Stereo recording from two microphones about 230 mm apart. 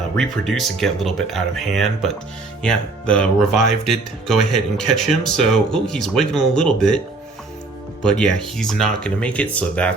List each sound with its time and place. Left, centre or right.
0.2 s speech: centre
8.0 s speech: centre